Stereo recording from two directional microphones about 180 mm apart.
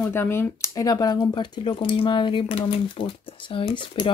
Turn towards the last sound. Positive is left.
turn(degrees=30)  # may be behind; listen again after turning